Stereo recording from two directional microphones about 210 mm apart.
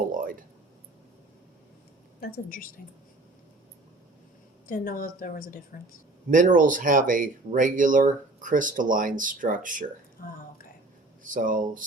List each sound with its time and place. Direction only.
0.1 s a sound: 40° right (ahead or behind)
2.2 s a woman's voice: 40° left (ahead or behind)
4.6 s a woman's voice: 40° left (ahead or behind)
6.3 s speech: 40° right (ahead or behind)
10.2 s speech: 40° left (ahead or behind)
11.2 s speech: 40° right (ahead or behind)